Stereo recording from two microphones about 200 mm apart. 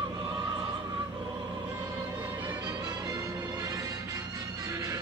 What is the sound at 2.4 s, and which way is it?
Music, 20° right (ahead or behind).